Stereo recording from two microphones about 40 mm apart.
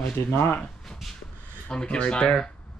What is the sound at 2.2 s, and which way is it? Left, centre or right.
Speech, centre.